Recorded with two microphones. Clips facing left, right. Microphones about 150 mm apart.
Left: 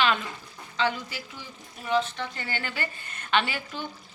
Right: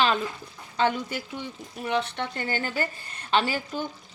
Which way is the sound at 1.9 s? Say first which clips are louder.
Left 1 dB; 65° right (ahead or behind).